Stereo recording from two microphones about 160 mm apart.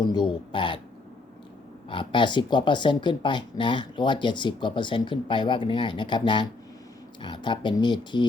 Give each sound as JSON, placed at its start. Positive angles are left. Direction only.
{"t": 0.0, "sound": "speech", "side_deg": 25}
{"t": 1.9, "sound": "speech", "side_deg": 30}